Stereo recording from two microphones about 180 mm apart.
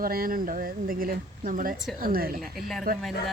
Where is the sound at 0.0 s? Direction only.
55° right (ahead or behind).